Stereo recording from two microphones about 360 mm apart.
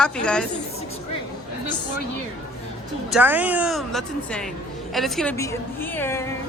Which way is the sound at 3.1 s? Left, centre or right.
Centre.